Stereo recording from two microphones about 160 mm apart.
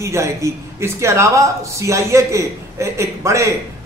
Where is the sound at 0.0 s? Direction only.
20° right (ahead or behind).